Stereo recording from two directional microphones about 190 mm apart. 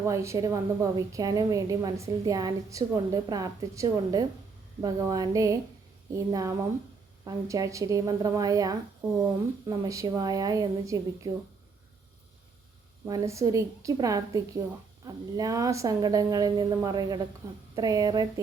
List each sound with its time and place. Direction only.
0.0 s a woman's voice: 15° right (ahead or behind)
13.1 s a woman's voice: 15° right (ahead or behind)